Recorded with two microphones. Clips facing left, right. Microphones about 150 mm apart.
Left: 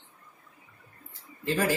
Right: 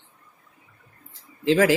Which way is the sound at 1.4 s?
90° right.